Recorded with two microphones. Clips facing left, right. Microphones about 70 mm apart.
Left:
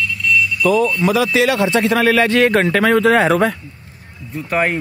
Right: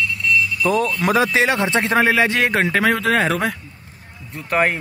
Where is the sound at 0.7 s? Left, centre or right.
Right.